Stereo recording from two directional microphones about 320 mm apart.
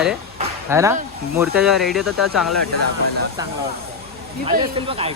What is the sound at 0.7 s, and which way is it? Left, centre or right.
Speech, centre.